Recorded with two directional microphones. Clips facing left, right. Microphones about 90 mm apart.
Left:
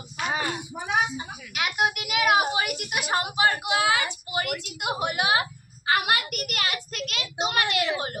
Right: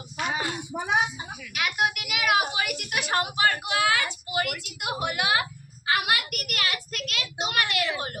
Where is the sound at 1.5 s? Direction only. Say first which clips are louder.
Left 1 dB; 25° left (ahead or behind).